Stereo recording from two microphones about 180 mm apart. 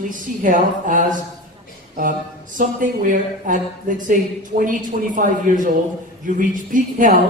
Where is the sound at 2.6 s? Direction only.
45° right (ahead or behind).